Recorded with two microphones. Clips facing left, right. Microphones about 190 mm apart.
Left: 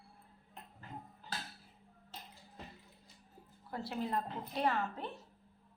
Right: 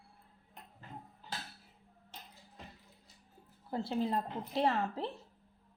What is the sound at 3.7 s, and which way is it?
A woman's voice, 25° right (ahead or behind).